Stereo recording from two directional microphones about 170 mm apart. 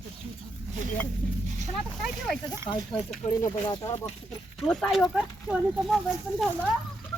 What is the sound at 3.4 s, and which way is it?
Speech, 20° left (ahead or behind).